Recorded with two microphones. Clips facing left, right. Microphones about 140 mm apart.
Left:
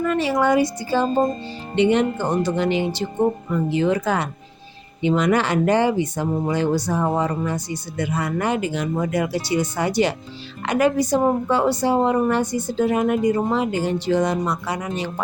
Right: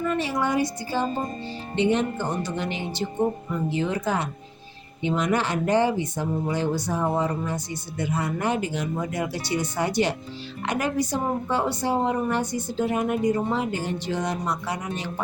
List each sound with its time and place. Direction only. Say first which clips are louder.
0.0 s speech: left 5 dB; 90° left